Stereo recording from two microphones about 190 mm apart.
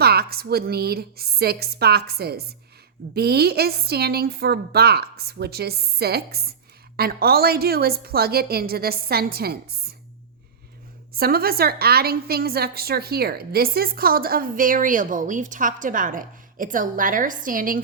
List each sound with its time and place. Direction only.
0.0 s a woman's voice: 55° right (ahead or behind)
11.1 s a woman's voice: 55° right (ahead or behind)